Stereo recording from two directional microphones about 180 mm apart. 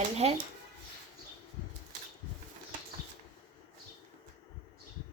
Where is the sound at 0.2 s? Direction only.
35° right (ahead or behind).